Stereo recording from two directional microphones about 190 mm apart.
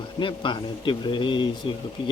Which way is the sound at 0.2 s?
25° left (ahead or behind).